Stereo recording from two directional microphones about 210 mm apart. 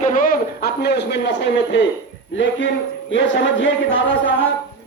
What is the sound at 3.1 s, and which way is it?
Speech, 60° left (ahead or behind).